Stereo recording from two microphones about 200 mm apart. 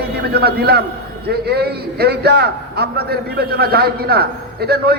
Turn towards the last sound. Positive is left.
turn(degrees=-50)  # may be behind; listen again after turning